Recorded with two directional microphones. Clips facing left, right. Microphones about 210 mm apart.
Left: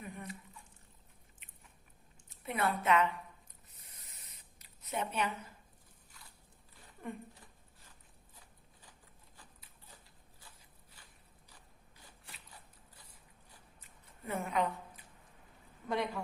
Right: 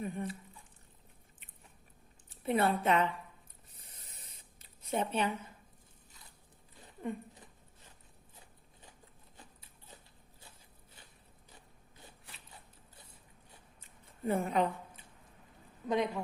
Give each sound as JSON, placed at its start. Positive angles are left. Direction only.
{"t": 0.0, "sound": "speech", "side_deg": -30}
{"t": 2.3, "sound": "speech", "side_deg": -30}
{"t": 3.8, "sound": "spray", "side_deg": -30}
{"t": 9.4, "sound": "a sound", "side_deg": -25}
{"t": 10.9, "sound": "biting", "side_deg": -25}
{"t": 12.0, "sound": "a sound", "side_deg": -25}
{"t": 15.9, "sound": "speech", "side_deg": -20}